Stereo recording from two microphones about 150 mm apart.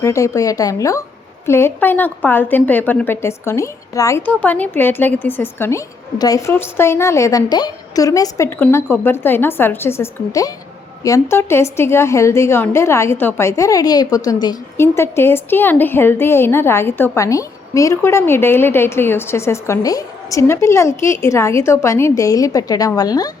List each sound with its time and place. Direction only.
0.0 s a woman's voice: 20° left (ahead or behind)